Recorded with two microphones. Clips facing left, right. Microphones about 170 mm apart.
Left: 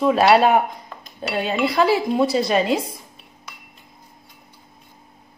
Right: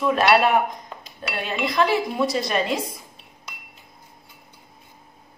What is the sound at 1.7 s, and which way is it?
A woman's voice, 30° left (ahead or behind).